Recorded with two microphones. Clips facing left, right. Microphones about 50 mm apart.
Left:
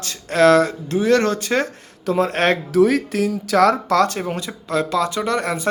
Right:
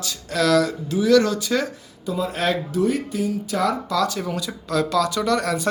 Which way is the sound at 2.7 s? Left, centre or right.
Left.